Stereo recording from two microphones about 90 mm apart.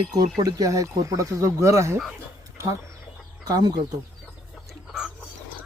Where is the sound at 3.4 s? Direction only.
50° right (ahead or behind).